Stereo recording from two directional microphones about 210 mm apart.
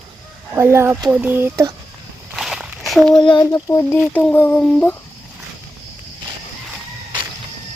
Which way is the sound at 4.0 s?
5° left (ahead or behind).